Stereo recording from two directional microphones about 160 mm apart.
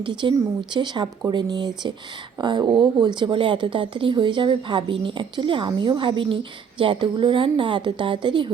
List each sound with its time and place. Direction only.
0.0 s speech: 30° right (ahead or behind)